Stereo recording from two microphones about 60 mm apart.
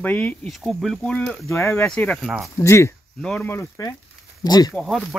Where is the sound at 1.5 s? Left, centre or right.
Left.